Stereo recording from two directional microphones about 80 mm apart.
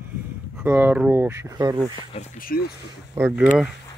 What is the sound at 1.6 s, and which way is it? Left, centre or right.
Speech, right.